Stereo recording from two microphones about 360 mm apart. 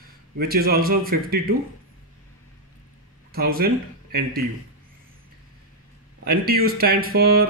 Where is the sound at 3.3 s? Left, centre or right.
Right.